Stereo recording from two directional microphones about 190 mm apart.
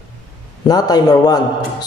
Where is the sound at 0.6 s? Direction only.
20° left (ahead or behind).